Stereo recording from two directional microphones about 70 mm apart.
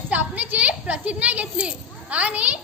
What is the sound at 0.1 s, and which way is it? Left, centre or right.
A child's voice, right.